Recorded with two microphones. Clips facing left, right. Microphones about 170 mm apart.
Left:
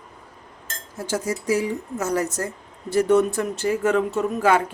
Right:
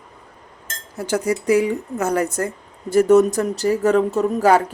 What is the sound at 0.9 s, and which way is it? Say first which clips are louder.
Speech: right 5 dB; 65° right (ahead or behind).